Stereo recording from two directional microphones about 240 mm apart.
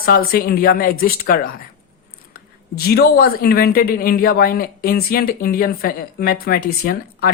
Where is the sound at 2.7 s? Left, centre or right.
Left.